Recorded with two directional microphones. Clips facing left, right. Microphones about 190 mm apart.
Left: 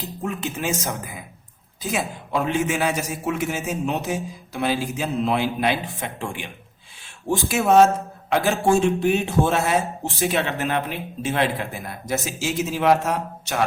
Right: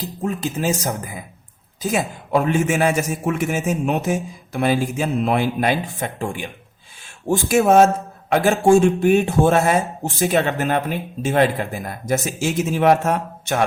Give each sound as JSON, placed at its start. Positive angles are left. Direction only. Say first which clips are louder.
{"t": 0.0, "sound": "speech", "louder": "right 4 dB", "side_deg": -35}